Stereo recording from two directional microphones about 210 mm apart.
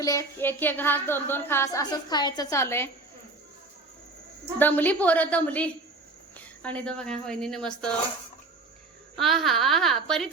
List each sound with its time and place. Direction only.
0.0 s speech: 15° left (ahead or behind)
4.6 s speech: 10° left (ahead or behind)
9.1 s speech: centre (ahead or behind)